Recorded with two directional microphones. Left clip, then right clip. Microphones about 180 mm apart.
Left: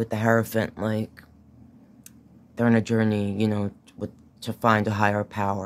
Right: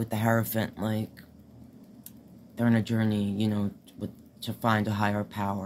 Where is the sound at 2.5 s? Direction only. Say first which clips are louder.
Left 6 dB; 50° left (ahead or behind).